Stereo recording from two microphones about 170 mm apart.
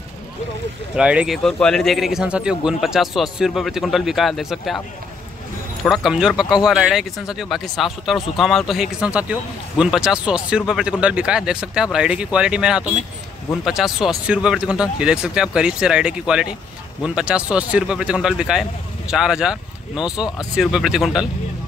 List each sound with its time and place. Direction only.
0.9 s speech: 5° right (ahead or behind)
5.9 s speech: 5° right (ahead or behind)